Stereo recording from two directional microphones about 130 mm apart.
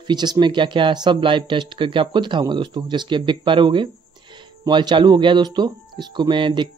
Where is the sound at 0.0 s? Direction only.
35° right (ahead or behind).